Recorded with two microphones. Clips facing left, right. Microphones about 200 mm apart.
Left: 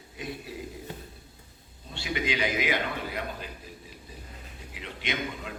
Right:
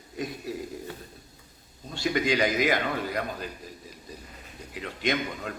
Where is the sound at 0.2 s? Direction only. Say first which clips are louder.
Right 5 dB; 40° right (ahead or behind).